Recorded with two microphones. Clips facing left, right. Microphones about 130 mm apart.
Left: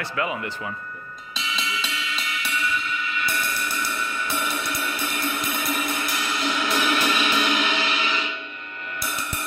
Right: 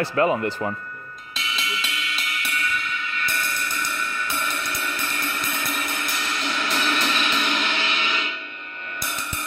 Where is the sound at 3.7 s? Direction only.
10° left (ahead or behind).